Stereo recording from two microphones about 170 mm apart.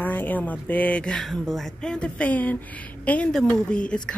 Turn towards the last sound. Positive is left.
turn(degrees=5)  # may be behind; listen again after turning